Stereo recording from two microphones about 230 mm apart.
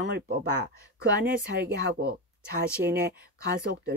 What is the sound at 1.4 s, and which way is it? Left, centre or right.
Speech, right.